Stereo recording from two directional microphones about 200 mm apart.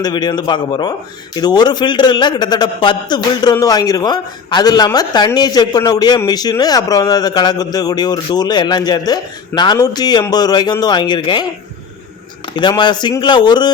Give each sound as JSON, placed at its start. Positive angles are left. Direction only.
{"t": 0.0, "sound": "a man's voice", "side_deg": 20}
{"t": 12.5, "sound": "a man's voice", "side_deg": 20}